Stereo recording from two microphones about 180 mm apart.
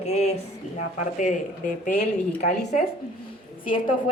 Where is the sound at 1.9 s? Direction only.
40° left (ahead or behind).